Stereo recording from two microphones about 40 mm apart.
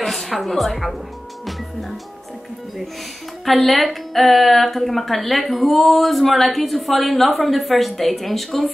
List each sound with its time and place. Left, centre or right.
0.0 s a woman's voice: centre
1.4 s music: centre
3.4 s a woman's voice: centre